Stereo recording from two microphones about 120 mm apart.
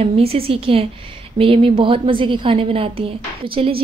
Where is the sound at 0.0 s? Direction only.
55° right (ahead or behind).